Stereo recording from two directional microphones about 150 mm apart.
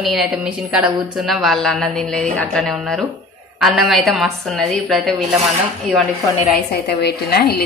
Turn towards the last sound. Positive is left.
turn(degrees=90)